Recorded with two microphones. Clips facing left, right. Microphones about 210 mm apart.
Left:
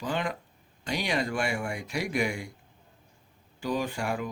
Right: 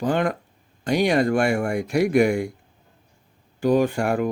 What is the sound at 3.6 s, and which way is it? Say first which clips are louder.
Speech: right 11 dB; 55° right (ahead or behind).